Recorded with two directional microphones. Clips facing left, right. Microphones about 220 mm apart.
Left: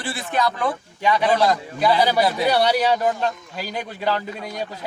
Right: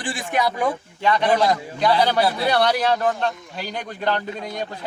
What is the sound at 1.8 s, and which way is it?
A man's voice, 5° left (ahead or behind).